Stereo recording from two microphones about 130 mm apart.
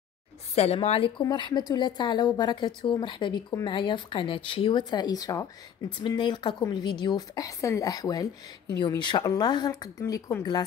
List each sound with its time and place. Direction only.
0.8 s speech: 45° left (ahead or behind)
1.2 s a woman's voice: 35° left (ahead or behind)
5.9 s a woman's voice: 40° left (ahead or behind)